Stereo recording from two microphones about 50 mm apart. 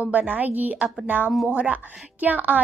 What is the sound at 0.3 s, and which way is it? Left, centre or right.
A woman's voice, right.